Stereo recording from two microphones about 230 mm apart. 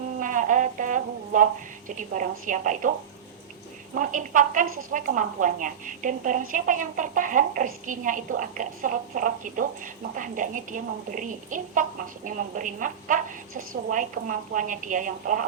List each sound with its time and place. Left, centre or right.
0.2 s a sound: right
2.5 s a woman's voice: right
3.9 s a woman's voice: right